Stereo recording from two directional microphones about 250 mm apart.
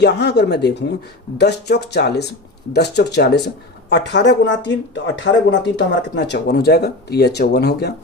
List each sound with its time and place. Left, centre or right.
0.0 s speech: left